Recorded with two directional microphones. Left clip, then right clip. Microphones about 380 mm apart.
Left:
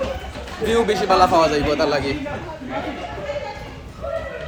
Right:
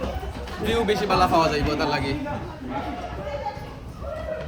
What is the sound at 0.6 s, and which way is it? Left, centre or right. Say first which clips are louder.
A man's voice: left 4 dB; centre.